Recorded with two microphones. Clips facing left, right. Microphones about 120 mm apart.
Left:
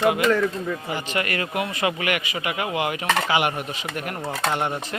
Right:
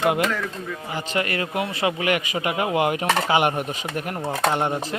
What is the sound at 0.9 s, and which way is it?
Speech, 30° right (ahead or behind).